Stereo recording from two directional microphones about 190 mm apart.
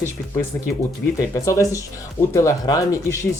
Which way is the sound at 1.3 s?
15° left (ahead or behind).